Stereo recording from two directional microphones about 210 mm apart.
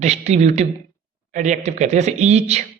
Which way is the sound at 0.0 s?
30° right (ahead or behind).